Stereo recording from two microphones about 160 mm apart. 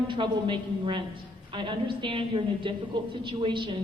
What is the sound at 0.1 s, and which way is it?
A woman's voice, 30° right (ahead or behind).